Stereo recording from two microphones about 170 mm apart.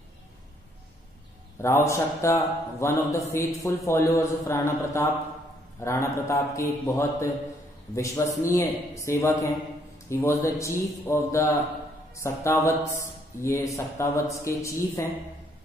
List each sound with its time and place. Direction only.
1.6 s a man's voice: 15° left (ahead or behind)